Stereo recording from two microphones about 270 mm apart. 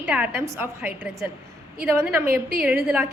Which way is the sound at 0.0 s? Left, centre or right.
Centre.